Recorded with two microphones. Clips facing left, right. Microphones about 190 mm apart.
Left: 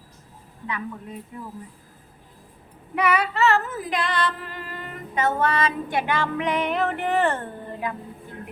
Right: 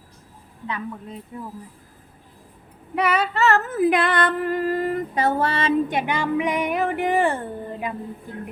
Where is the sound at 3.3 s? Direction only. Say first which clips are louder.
Right 1 dB; 40° right (ahead or behind).